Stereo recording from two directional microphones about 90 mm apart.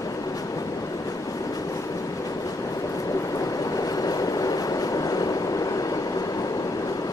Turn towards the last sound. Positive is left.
turn(degrees=45)  # may be behind; listen again after turning